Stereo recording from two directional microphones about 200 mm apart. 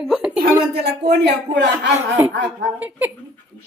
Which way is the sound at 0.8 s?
55° right (ahead or behind).